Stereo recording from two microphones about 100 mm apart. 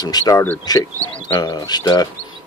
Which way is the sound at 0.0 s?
40° left (ahead or behind).